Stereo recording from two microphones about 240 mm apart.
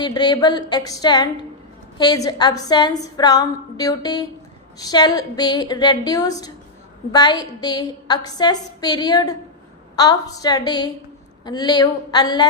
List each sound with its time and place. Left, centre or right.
0.0 s a woman's voice: centre